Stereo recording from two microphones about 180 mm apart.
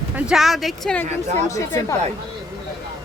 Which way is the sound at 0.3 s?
Centre (ahead or behind).